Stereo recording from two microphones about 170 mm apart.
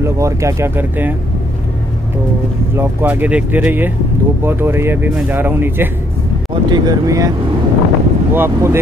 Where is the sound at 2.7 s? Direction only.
15° right (ahead or behind).